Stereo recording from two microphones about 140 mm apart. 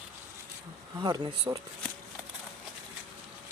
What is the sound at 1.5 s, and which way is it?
Speech, 25° right (ahead or behind).